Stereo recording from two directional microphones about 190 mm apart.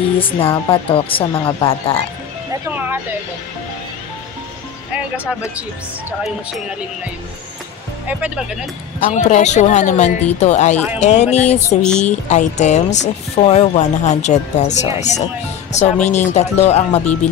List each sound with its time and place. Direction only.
0.2 s speech: 30° left (ahead or behind)
8.1 s speech: 5° right (ahead or behind)
9.0 s speech: 40° left (ahead or behind)
11.8 s speech: 5° left (ahead or behind)
12.1 s speech: 40° left (ahead or behind)